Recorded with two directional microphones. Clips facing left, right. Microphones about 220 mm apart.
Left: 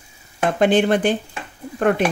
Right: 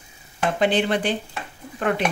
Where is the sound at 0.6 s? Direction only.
50° left (ahead or behind).